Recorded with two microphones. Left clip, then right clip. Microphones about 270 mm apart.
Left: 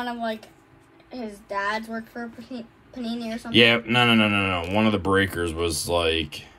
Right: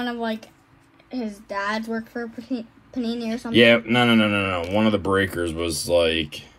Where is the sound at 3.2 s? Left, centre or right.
Right.